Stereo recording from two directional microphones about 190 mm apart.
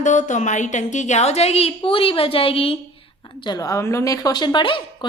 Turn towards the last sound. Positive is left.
turn(degrees=25)  # may be behind; listen again after turning